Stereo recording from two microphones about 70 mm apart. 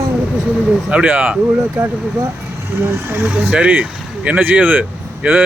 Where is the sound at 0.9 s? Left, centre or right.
Right.